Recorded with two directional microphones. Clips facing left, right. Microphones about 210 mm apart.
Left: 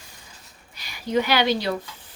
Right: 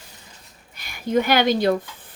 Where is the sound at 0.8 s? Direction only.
50° right (ahead or behind).